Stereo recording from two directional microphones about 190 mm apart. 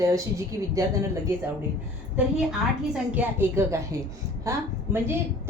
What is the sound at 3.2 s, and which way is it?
A woman's voice, 15° right (ahead or behind).